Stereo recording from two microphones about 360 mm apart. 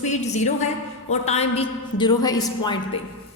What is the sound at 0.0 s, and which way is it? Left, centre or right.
A woman's voice, centre.